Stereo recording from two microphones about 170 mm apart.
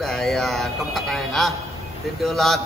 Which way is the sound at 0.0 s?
5° left (ahead or behind).